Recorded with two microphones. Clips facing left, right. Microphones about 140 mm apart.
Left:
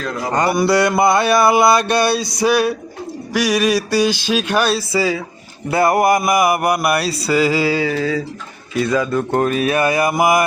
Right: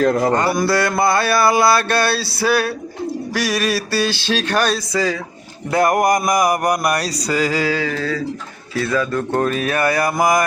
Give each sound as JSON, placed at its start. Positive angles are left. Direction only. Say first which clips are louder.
{"t": 0.0, "sound": "mantra", "louder": "right 8 dB", "side_deg": -55}
{"t": 0.3, "sound": "mantra", "louder": "left 2 dB", "side_deg": 15}
{"t": 3.3, "sound": "speech", "louder": "left 5 dB", "side_deg": 20}